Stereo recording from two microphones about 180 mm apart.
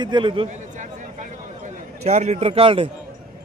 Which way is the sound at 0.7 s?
45° right (ahead or behind).